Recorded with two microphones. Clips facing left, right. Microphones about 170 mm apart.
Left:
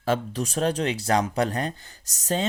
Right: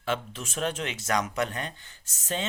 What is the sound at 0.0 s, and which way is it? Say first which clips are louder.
Speech: left 6 dB; 40° left (ahead or behind).